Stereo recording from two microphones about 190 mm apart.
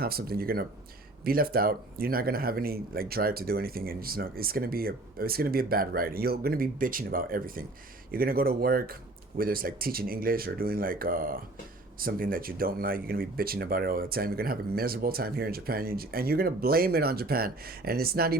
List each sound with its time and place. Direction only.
0.0 s speech: 55° right (ahead or behind)